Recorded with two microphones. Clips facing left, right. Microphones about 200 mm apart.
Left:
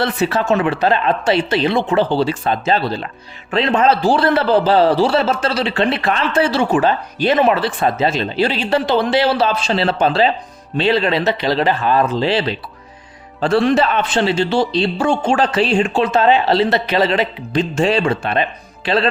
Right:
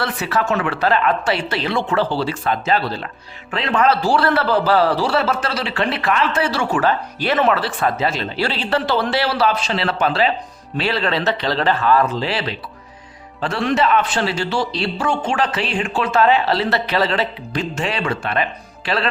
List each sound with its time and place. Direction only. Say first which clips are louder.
0.0 s a man's voice: left 4 dB; 25° left (ahead or behind)